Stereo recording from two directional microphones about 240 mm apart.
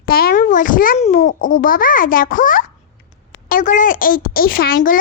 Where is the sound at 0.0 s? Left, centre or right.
Left.